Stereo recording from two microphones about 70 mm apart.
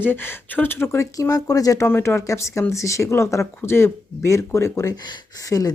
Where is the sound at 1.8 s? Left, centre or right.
Left.